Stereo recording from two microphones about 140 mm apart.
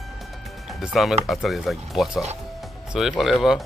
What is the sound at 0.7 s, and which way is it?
Speech, centre (ahead or behind).